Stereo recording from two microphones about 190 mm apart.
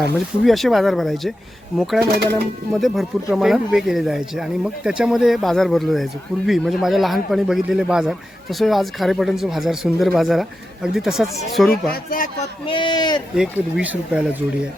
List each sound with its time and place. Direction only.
0.4 s speech: centre (ahead or behind)
2.1 s speech: 55° right (ahead or behind)
2.7 s speech: centre (ahead or behind)
11.9 s speech: 45° left (ahead or behind)
12.6 s speech: 25° left (ahead or behind)
13.3 s speech: 5° right (ahead or behind)